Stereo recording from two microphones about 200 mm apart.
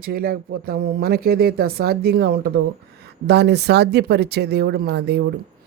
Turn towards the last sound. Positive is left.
turn(degrees=-55)  # may be behind; listen again after turning